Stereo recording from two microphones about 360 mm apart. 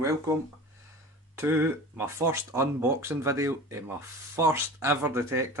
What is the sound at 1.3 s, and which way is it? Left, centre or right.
Speech, centre.